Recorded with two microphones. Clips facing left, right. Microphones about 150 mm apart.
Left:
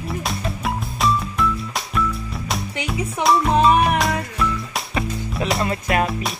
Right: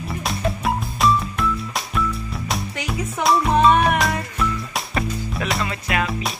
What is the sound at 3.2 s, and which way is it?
Music, centre (ahead or behind).